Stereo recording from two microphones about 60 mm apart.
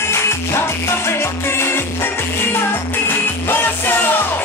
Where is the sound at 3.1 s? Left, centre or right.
Left.